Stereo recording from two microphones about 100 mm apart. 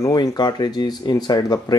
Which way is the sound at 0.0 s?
40° left (ahead or behind).